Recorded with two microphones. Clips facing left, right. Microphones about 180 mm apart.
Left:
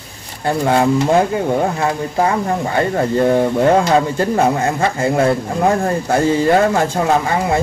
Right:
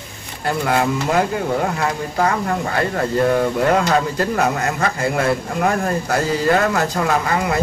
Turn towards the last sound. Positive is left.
turn(degrees=25)  # may be behind; listen again after turning